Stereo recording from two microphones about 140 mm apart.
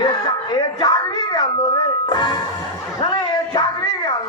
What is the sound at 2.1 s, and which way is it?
Music, 30° left (ahead or behind).